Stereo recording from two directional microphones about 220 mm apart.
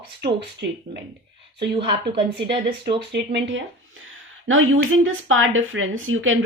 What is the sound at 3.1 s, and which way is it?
Speech, 50° right (ahead or behind).